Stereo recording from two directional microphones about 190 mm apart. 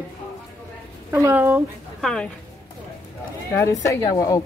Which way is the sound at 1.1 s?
10° right (ahead or behind).